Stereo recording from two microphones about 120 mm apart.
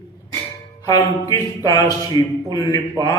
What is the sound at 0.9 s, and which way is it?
A man's voice, 30° left (ahead or behind).